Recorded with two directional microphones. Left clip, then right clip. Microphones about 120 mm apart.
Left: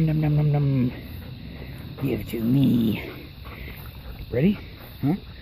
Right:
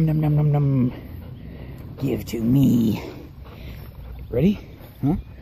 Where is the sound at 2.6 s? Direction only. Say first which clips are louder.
Right 2 dB; 35° right (ahead or behind).